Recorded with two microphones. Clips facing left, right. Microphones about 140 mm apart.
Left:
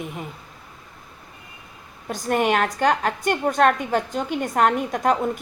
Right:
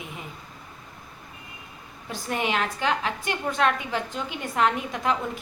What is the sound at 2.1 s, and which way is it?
A woman's voice, 50° left (ahead or behind).